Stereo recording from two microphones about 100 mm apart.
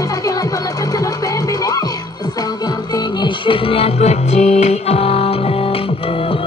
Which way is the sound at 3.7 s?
85° left.